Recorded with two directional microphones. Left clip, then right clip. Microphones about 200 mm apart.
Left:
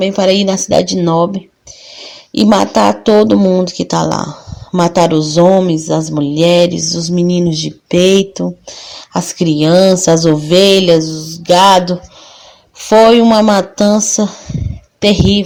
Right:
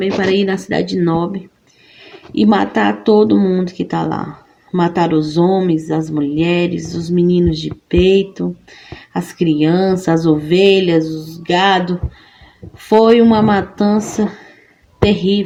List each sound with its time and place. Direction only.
0.3 s speech: 40° left (ahead or behind)
2.3 s speech: 40° left (ahead or behind)
15.0 s speech: 40° left (ahead or behind)